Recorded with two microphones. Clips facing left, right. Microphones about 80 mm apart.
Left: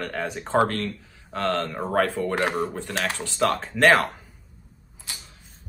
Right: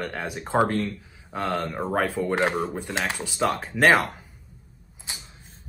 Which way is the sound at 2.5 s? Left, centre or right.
Centre.